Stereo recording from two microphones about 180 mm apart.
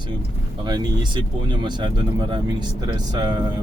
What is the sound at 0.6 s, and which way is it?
Speech, 25° right (ahead or behind).